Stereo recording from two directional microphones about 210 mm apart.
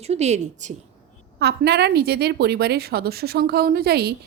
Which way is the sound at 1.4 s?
50° right (ahead or behind).